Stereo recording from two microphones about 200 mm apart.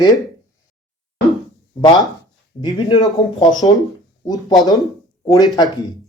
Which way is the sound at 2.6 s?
25° left (ahead or behind).